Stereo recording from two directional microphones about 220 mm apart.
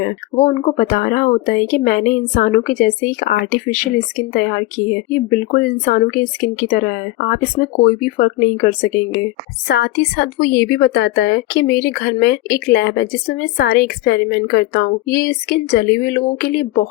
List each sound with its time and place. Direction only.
0.4 s a woman's voice: 35° left (ahead or behind)
9.6 s a woman's voice: 50° left (ahead or behind)